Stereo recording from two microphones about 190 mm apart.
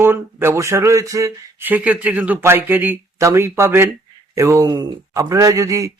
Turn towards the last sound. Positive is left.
turn(degrees=-15)  # may be behind; listen again after turning